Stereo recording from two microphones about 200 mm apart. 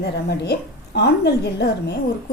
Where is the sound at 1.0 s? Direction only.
55° left (ahead or behind).